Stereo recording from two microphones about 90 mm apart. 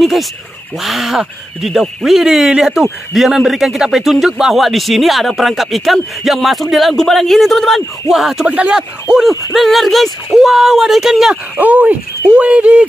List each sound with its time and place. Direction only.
0.0 s speech: centre (ahead or behind)
8.5 s speech: 15° right (ahead or behind)
11.5 s speech: 20° right (ahead or behind)